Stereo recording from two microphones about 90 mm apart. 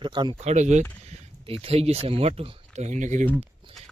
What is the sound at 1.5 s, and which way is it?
Speech, 90° right.